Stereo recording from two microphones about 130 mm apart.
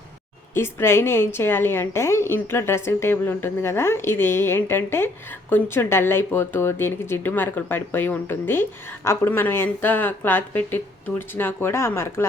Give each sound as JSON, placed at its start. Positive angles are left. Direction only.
{"t": 0.5, "sound": "a woman's voice", "side_deg": 20}